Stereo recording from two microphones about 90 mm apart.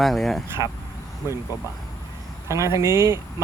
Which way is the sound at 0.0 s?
Centre (ahead or behind).